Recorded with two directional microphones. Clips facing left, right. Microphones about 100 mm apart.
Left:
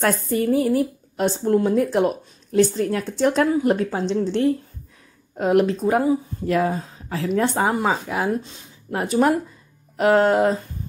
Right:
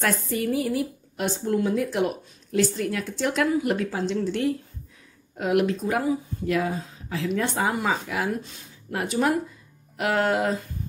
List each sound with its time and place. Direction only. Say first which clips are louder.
0.0 s speech: left 5 dB; 35° left (ahead or behind)